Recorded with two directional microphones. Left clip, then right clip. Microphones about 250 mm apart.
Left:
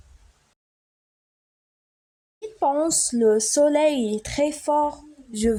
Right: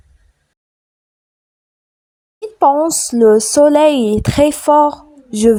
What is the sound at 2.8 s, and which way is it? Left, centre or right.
Speech, centre.